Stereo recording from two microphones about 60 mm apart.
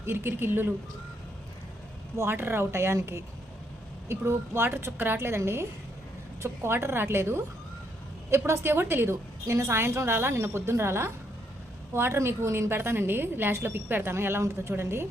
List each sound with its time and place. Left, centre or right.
0.0 s speech: right
2.1 s a woman's voice: right
6.4 s a woman's voice: right